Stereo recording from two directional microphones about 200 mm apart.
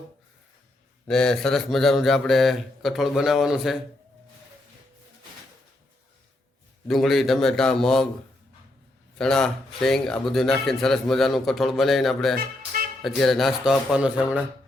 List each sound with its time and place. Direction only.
1.0 s speech: 5° left (ahead or behind)
6.8 s speech: centre (ahead or behind)
9.1 s speech: 5° left (ahead or behind)
12.4 s music: 45° right (ahead or behind)
13.0 s speech: centre (ahead or behind)